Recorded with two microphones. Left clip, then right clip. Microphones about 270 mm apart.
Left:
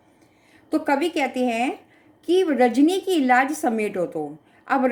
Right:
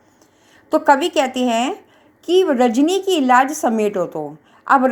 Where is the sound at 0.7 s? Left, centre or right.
Right.